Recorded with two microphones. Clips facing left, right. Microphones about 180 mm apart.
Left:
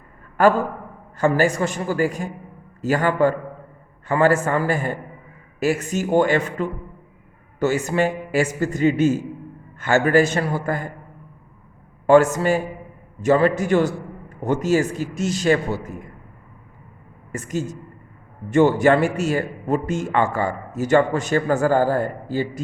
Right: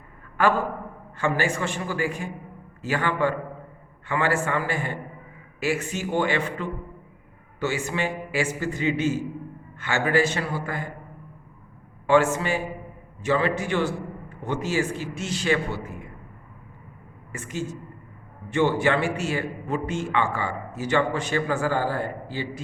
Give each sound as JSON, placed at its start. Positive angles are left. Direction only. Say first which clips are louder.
{"t": 1.2, "sound": "a man's voice", "louder": "left 6 dB", "side_deg": 40}
{"t": 12.0, "sound": "a man's voice", "louder": "left 6 dB", "side_deg": 40}
{"t": 17.3, "sound": "a man's voice", "louder": "left 5 dB", "side_deg": 40}